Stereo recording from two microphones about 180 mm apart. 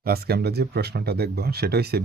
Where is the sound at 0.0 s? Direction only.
60° right (ahead or behind).